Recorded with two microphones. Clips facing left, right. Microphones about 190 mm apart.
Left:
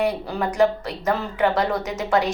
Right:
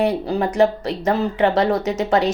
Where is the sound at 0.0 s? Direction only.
25° right (ahead or behind).